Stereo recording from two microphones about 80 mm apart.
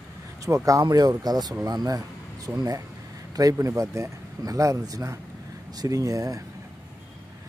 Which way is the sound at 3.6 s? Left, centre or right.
Right.